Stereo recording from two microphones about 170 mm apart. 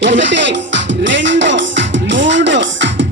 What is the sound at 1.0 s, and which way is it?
Music, 90° right.